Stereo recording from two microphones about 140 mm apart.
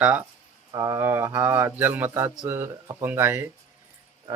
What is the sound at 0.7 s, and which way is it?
Speech, 20° right (ahead or behind).